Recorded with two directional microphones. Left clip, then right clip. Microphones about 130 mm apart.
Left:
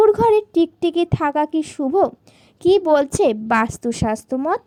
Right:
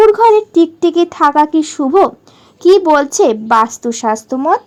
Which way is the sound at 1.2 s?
35° left (ahead or behind).